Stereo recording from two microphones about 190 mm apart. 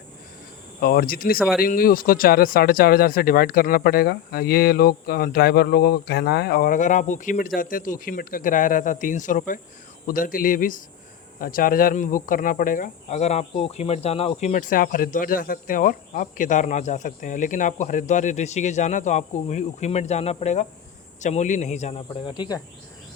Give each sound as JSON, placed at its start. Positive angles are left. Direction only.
{"t": 0.8, "sound": "speech", "side_deg": 55}
{"t": 14.5, "sound": "speech", "side_deg": 45}